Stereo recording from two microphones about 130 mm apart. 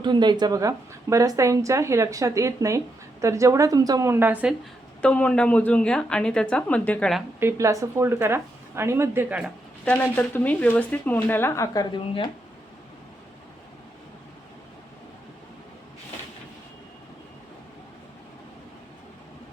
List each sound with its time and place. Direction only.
0.0 s speech: 35° right (ahead or behind); by 4.5 s 10° right (ahead or behind)
5.0 s speech: 10° left (ahead or behind)
7.3 s speech: 20° right (ahead or behind)
9.8 s speech: 10° left (ahead or behind); by 12.3 s 35° left (ahead or behind)